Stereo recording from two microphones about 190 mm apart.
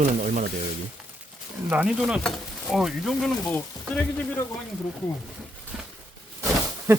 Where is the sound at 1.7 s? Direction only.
5° right (ahead or behind).